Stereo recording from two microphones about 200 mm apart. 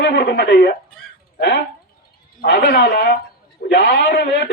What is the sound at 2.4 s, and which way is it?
Speech, 50° left (ahead or behind).